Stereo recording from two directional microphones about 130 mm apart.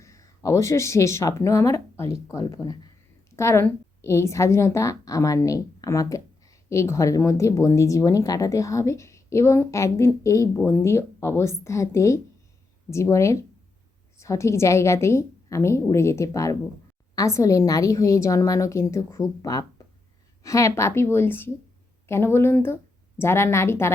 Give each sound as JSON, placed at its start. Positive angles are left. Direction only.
{"t": 0.0, "sound": "a woman's voice", "side_deg": 25}